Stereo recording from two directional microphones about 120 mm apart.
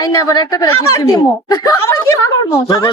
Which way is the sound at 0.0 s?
30° left (ahead or behind).